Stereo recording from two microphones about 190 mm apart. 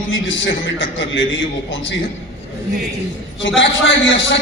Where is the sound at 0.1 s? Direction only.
75° left (ahead or behind).